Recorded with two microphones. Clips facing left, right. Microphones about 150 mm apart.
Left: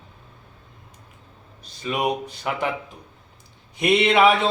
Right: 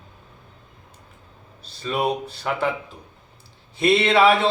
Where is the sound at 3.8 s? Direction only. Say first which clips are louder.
Even; 15° left (ahead or behind).